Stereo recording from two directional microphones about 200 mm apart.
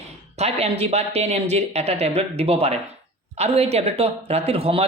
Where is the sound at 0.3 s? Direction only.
30° right (ahead or behind).